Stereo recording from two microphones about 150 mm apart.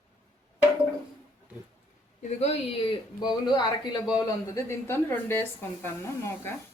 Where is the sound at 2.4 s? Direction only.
40° left (ahead or behind); by 6.5 s 15° left (ahead or behind).